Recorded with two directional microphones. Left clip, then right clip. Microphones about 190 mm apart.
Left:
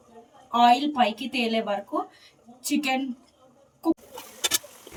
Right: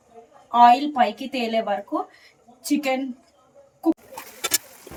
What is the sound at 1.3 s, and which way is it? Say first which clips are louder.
Speech: right 3 dB; 5° right (ahead or behind).